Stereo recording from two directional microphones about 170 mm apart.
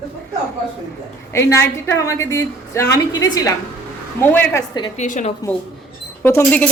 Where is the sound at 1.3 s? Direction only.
15° left (ahead or behind).